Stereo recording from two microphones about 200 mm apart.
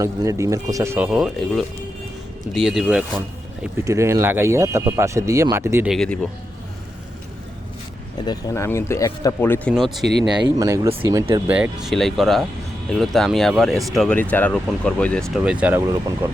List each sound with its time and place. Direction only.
0.0 s speech: 15° right (ahead or behind)
3.2 s speech: 15° right (ahead or behind)
5.9 s speech: 5° left (ahead or behind)
8.2 s speech: 20° left (ahead or behind); by 10.1 s centre (ahead or behind)
10.8 s speech: 25° right (ahead or behind)